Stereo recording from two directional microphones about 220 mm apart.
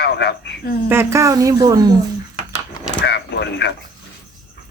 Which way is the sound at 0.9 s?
10° right (ahead or behind).